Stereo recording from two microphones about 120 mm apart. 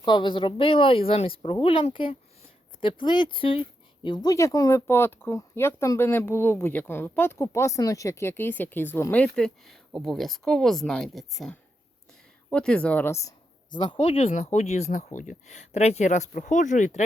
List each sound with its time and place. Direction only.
0.0 s speech: 40° left (ahead or behind)
4.0 s speech: 35° left (ahead or behind); by 13.1 s 10° left (ahead or behind)
13.1 s speech: 25° left (ahead or behind)
13.7 s speech: 45° left (ahead or behind); by 17.0 s 90° left